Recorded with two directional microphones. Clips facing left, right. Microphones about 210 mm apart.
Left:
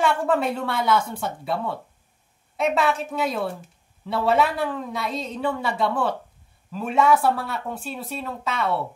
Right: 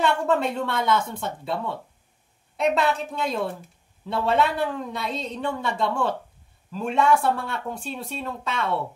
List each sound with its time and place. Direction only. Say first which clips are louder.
0.0 s a woman's voice: left 1 dB; 5° left (ahead or behind)
2.5 s speech: even; 5° left (ahead or behind)